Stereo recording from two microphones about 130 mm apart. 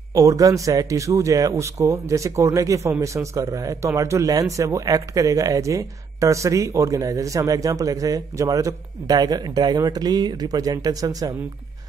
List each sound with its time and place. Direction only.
0.1 s a man's voice: 25° right (ahead or behind)